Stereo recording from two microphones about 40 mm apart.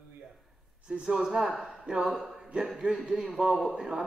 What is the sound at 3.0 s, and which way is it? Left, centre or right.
A man's voice, centre.